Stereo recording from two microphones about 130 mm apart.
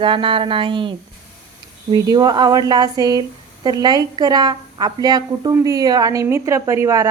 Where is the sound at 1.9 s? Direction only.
30° right (ahead or behind).